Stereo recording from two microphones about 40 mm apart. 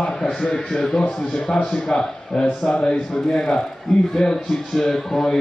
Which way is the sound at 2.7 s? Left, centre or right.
Left.